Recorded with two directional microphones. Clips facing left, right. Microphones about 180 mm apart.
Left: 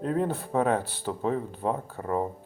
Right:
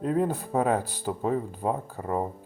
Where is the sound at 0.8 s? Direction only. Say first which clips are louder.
Right 1 dB; 40° right (ahead or behind).